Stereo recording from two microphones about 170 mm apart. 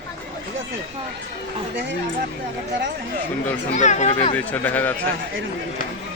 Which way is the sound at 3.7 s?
45° left (ahead or behind).